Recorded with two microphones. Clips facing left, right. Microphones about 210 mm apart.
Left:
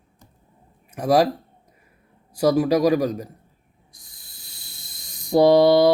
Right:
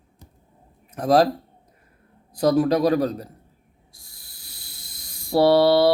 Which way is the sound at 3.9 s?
20° left (ahead or behind).